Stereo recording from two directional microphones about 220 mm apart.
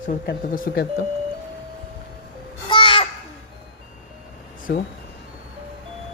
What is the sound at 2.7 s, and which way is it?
Children playing, 20° left (ahead or behind).